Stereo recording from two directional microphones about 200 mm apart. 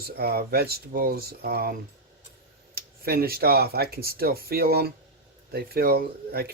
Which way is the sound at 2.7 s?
50° right (ahead or behind).